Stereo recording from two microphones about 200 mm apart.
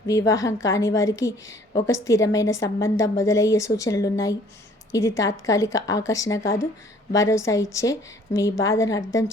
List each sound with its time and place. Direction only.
0.1 s a woman's voice: 15° left (ahead or behind)